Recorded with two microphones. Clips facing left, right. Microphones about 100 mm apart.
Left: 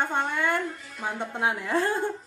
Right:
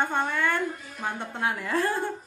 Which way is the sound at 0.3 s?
20° left (ahead or behind).